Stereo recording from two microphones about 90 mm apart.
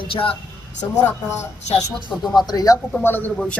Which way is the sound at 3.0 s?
25° left (ahead or behind).